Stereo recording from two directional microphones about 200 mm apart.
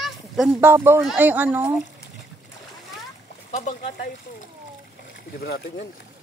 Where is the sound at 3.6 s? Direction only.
35° left (ahead or behind).